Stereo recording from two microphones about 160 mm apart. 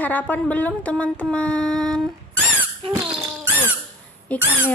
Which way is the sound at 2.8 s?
35° right (ahead or behind).